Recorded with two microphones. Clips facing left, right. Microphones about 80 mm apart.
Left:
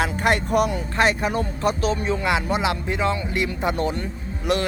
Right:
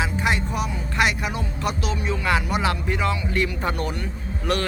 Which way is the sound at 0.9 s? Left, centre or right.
Left.